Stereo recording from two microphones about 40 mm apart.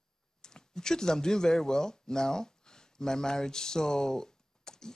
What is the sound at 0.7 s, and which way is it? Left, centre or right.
Speech, centre.